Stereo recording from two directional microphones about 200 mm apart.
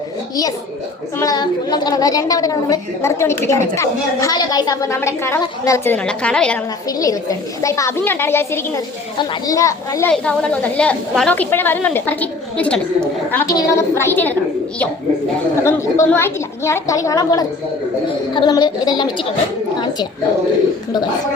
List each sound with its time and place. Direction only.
1.2 s a woman's voice: 20° left (ahead or behind)
6.8 s a woman's voice: 15° left (ahead or behind)
10.1 s a woman's voice: 5° left (ahead or behind)
15.6 s a woman's voice: 10° left (ahead or behind)